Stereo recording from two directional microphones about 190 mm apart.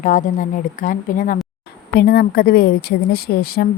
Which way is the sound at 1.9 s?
55° left (ahead or behind).